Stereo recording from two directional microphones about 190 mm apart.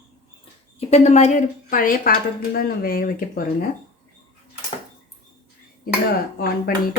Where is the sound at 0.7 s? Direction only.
35° left (ahead or behind); by 3.6 s 50° left (ahead or behind).